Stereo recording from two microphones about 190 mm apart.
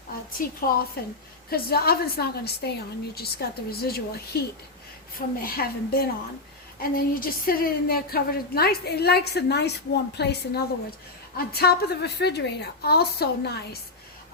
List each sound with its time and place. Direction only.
0.4 s a woman's voice: 45° left (ahead or behind)